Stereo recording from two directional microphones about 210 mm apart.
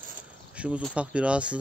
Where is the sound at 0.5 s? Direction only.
5° right (ahead or behind).